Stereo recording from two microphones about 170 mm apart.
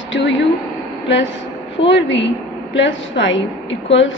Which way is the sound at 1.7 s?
90° left.